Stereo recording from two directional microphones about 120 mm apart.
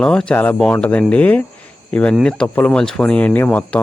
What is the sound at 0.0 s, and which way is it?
Speech, 5° left (ahead or behind).